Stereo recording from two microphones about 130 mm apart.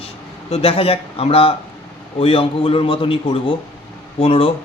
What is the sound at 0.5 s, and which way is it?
A man's voice, 45° left (ahead or behind).